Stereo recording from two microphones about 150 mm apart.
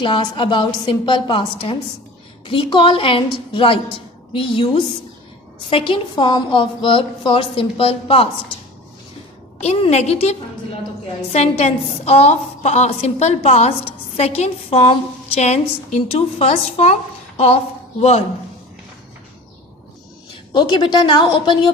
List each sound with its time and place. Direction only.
0.0 s a woman's voice: 30° left (ahead or behind)
9.6 s a woman's voice: 45° left (ahead or behind)
20.5 s a woman's voice: 30° left (ahead or behind)